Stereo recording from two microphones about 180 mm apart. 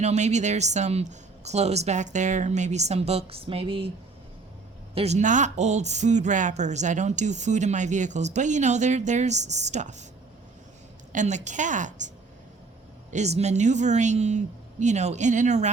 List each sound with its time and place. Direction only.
0.0 s speech: 40° right (ahead or behind)
4.9 s speech: 40° right (ahead or behind)
11.1 s a woman's voice: 40° right (ahead or behind)